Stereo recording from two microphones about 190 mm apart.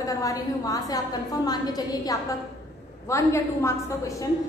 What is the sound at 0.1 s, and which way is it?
A woman's voice, 20° left (ahead or behind).